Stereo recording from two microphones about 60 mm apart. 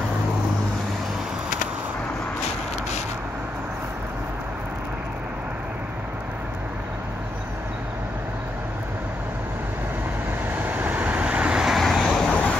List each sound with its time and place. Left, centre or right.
10.5 s vehicle: right
11.6 s vehicle: centre
12.3 s vehicle: centre